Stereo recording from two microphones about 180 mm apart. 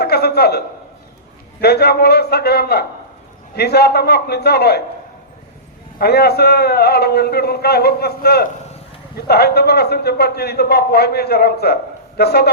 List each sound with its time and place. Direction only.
0.0 s a sound: 65° left (ahead or behind)
1.6 s a man's voice: 65° left (ahead or behind)
6.0 s a man's voice: 60° left (ahead or behind)